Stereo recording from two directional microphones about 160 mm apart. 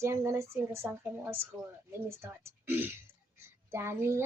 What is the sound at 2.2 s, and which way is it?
Child singing, 15° right (ahead or behind).